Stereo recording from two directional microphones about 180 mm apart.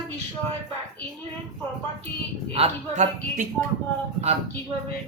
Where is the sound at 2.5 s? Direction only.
35° right (ahead or behind).